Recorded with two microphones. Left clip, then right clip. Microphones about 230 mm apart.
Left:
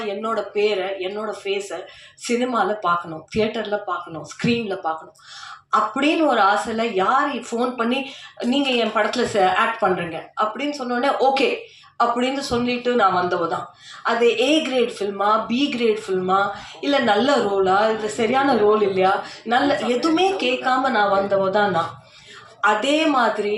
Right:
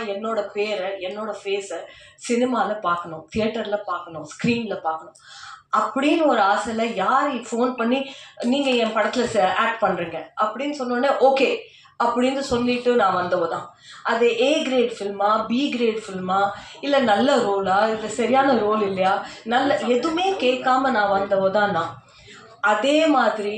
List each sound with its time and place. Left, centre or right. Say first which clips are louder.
0.2 s a woman's voice: left 5 dB; left
5.7 s a woman's voice: left 1 dB; left